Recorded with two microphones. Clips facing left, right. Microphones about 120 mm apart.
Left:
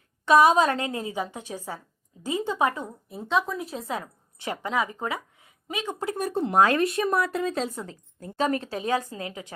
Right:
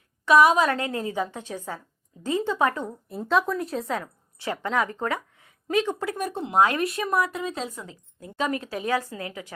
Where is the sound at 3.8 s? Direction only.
15° left (ahead or behind).